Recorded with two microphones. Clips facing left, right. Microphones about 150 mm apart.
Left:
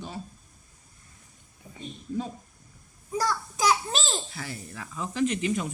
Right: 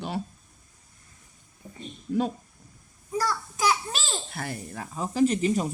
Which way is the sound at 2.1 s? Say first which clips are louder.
Right 6 dB; 75° right (ahead or behind).